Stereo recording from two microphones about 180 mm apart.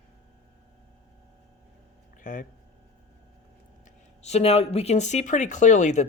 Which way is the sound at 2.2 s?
45° left (ahead or behind).